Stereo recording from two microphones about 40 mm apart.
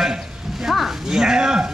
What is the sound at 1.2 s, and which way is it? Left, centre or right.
Speech, centre.